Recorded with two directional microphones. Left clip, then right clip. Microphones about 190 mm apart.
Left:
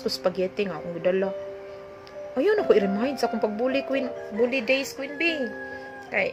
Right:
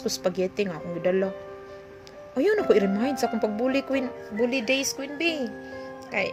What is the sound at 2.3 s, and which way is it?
Speech, 30° right (ahead or behind).